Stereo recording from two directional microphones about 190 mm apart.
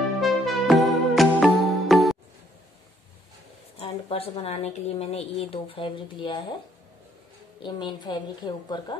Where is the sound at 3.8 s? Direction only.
30° left (ahead or behind).